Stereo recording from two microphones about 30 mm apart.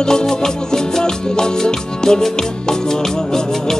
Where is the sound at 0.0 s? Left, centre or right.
Left.